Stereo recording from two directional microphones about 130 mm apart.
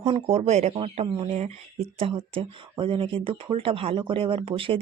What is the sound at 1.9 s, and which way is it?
Speech, 45° right (ahead or behind).